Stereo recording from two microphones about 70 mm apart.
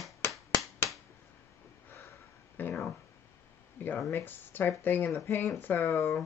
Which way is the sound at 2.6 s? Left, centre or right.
Left.